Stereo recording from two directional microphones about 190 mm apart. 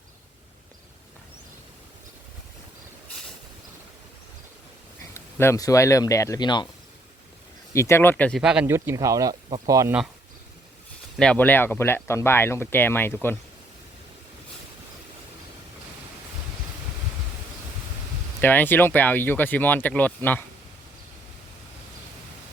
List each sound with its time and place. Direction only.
5.1 s speech: 15° left (ahead or behind)
7.7 s speech: 15° left (ahead or behind)
8.4 s speech: 5° right (ahead or behind)
11.2 s speech: 5° left (ahead or behind)
18.3 s speech: 10° left (ahead or behind)